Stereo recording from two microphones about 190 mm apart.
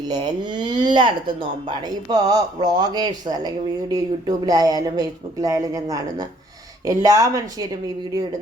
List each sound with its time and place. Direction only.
0.1 s speech: 25° right (ahead or behind)